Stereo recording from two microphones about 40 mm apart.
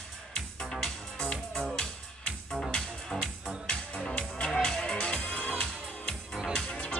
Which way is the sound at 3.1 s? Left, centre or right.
Centre.